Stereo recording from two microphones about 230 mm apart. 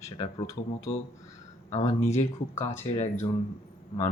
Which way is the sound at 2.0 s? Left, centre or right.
Left.